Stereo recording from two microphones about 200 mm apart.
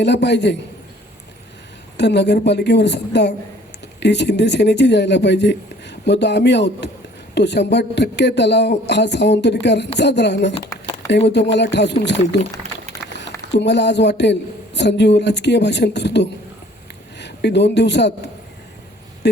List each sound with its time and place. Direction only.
0.0 s a woman's voice: 60° left (ahead or behind)
2.0 s a woman's voice: 60° left (ahead or behind)
11.5 s a woman's voice: 60° left (ahead or behind)
13.5 s a woman's voice: 60° left (ahead or behind)
19.2 s a sound: 60° left (ahead or behind)